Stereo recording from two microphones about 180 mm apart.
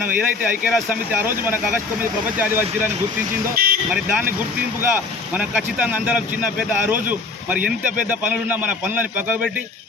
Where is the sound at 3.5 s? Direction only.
55° right (ahead or behind).